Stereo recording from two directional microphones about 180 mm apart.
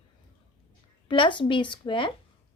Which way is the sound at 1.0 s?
25° left (ahead or behind).